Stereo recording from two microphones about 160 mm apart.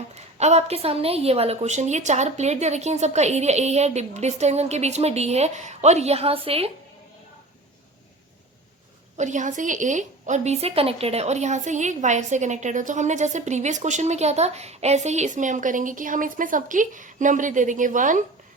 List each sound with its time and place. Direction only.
0.1 s a woman's voice: 45° right (ahead or behind)
9.1 s a woman's voice: 50° right (ahead or behind)